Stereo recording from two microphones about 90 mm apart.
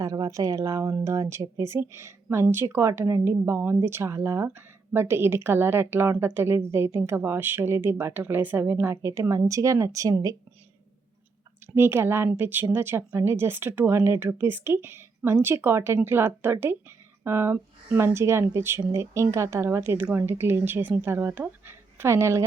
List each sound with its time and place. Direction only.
0.0 s a woman's voice: 40° right (ahead or behind)
11.7 s a woman's voice: 25° right (ahead or behind)